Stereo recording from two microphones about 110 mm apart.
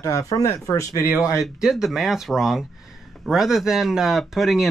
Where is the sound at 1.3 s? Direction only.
5° right (ahead or behind).